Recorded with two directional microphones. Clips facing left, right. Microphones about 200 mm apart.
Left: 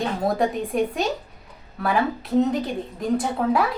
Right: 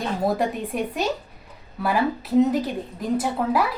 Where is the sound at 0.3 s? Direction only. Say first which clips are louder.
Left 2 dB; centre (ahead or behind).